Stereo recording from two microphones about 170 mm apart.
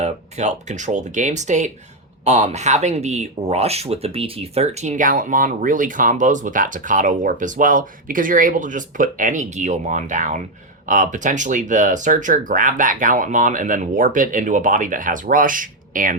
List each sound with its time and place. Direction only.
0.0 s speech: 40° right (ahead or behind)